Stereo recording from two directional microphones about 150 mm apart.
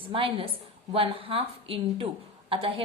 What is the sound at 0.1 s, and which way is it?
A woman's voice, 35° right (ahead or behind).